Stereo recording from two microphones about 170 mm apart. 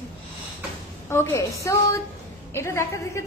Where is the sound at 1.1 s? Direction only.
15° left (ahead or behind).